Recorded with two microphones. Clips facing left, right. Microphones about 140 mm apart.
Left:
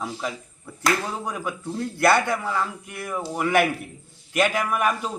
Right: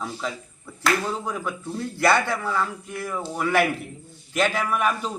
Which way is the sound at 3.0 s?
10° left (ahead or behind).